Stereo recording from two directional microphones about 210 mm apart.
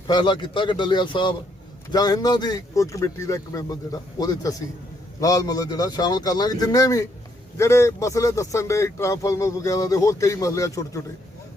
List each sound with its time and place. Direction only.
0.1 s a man's voice: 20° left (ahead or behind)